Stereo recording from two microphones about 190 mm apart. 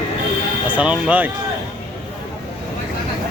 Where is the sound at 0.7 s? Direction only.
5° right (ahead or behind).